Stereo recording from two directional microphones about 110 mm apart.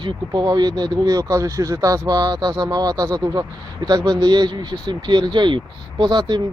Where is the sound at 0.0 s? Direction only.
40° right (ahead or behind).